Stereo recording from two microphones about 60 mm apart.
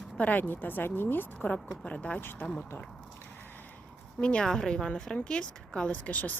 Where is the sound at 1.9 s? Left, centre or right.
Left.